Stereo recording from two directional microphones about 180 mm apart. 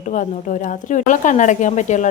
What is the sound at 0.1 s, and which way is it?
Speech, 45° left (ahead or behind).